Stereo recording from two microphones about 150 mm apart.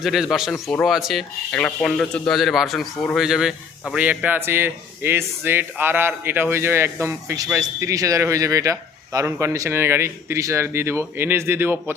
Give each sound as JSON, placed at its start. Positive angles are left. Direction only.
{"t": 0.0, "sound": "a man's voice", "side_deg": 0}